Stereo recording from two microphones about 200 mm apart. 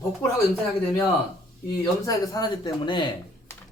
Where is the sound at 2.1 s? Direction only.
15° left (ahead or behind).